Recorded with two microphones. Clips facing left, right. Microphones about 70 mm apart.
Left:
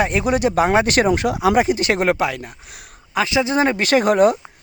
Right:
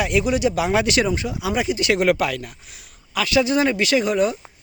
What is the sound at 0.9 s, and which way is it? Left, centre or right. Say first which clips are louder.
Speech: left 4 dB; left.